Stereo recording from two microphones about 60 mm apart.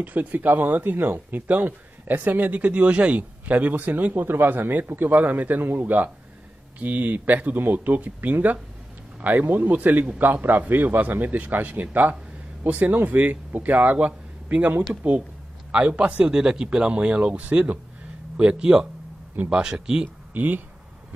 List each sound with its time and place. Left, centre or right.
0.0 s speech: right
6.8 s speech: right; by 20.1 s centre
20.3 s speech: right